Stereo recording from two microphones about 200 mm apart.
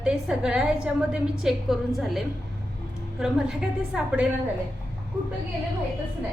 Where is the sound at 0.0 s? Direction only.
5° right (ahead or behind).